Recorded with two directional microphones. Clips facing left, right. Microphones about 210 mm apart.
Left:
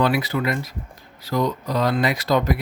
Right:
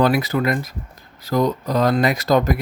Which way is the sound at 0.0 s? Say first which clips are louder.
Right 3 dB; 45° right (ahead or behind).